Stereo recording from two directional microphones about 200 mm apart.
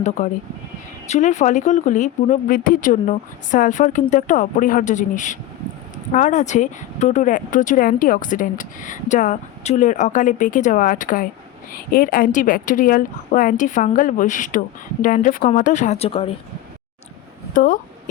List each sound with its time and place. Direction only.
0.0 s speech: 35° left (ahead or behind)
17.5 s speech: 45° left (ahead or behind)